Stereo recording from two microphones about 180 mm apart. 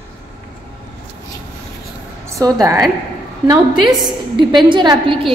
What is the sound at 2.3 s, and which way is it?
Speech, 20° right (ahead or behind).